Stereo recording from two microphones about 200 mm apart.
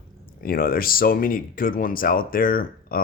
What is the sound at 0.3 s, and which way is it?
Speech, 45° left (ahead or behind).